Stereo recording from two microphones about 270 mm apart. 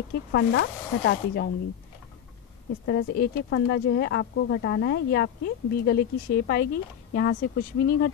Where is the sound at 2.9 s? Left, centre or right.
Left.